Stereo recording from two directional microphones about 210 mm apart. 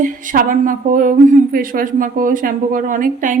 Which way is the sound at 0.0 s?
40° right (ahead or behind).